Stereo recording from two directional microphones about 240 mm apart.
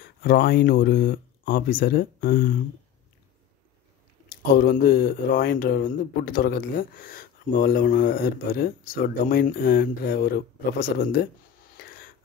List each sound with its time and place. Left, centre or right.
0.0 s speech: left
4.3 s speech: left
11.7 s a sound: left